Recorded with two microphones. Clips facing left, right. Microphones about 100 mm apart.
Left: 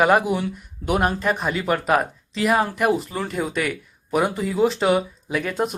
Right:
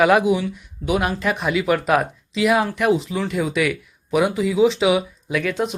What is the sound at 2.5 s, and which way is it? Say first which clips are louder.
Speech: left 2 dB; 35° left (ahead or behind).